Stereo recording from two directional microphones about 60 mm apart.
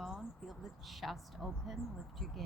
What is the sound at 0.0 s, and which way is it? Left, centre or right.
Speech, centre.